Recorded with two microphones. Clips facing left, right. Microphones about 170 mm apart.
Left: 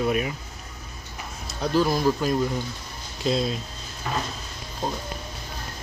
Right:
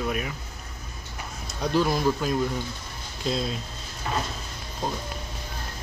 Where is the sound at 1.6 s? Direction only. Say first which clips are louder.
Left 1 dB; centre (ahead or behind).